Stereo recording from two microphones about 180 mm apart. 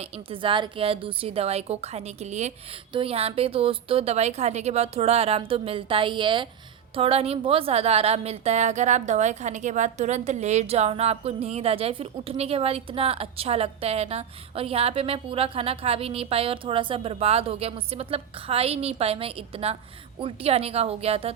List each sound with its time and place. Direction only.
0.0 s a woman's voice: 30° right (ahead or behind)